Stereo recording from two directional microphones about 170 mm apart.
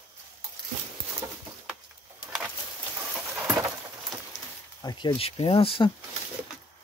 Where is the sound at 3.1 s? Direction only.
10° right (ahead or behind).